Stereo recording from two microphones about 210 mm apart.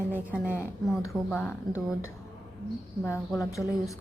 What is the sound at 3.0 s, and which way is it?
Speech, 10° left (ahead or behind).